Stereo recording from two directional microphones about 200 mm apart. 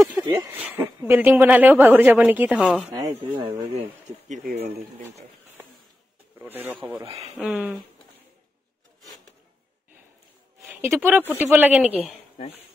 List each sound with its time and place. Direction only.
0.2 s speech: 15° right (ahead or behind)
2.9 s speech: 20° right (ahead or behind)
4.3 s speech: 40° right (ahead or behind)
6.3 s speech: 10° right (ahead or behind)
10.6 s speech: 10° right (ahead or behind)
12.0 s speech: 30° left (ahead or behind)